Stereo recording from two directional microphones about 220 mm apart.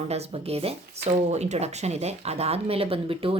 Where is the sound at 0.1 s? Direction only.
30° right (ahead or behind).